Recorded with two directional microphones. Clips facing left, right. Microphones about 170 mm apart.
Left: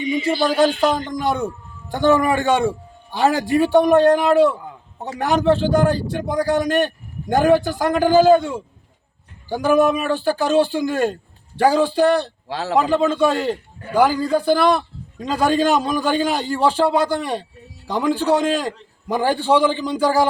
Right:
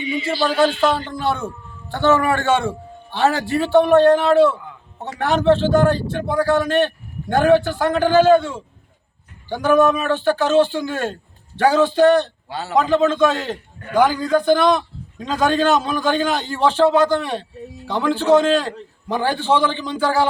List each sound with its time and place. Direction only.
0.4 s a man's voice: 10° left (ahead or behind)
12.5 s a man's voice: 90° left
12.7 s a man's voice: 10° left (ahead or behind)